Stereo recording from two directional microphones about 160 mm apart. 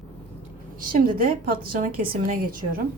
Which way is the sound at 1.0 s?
65° right (ahead or behind).